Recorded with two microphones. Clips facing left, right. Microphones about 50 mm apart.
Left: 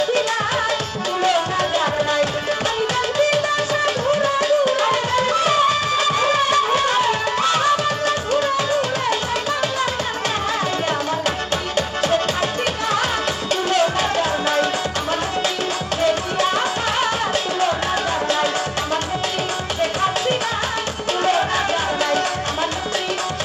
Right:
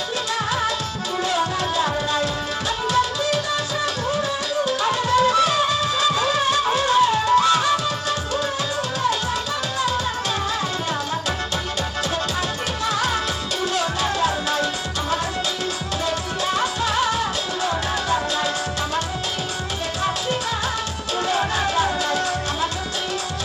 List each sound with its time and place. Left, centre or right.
1.2 s music: left
13.7 s music: left
16.0 s music: left
19.8 s music: left